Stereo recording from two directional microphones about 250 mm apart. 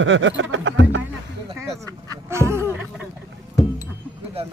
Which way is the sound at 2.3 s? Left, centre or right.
Centre.